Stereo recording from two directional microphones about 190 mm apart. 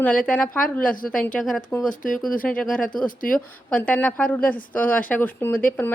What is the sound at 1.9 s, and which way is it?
Speech, 45° left (ahead or behind).